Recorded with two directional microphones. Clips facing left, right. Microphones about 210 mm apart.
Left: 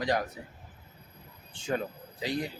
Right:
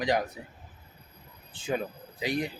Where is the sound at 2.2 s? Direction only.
15° right (ahead or behind).